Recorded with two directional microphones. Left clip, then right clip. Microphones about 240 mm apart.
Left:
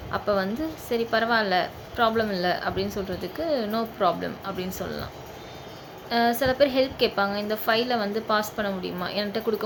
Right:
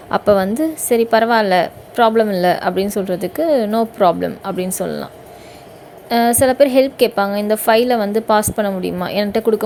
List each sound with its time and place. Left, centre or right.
0.1 s a woman's voice: right
6.1 s a woman's voice: right